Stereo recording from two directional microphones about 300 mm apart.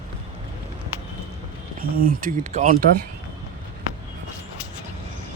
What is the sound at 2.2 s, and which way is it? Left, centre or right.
Speech, right.